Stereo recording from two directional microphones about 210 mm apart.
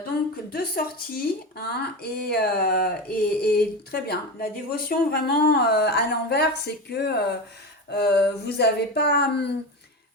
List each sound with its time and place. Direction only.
0.5 s speech: 45° left (ahead or behind)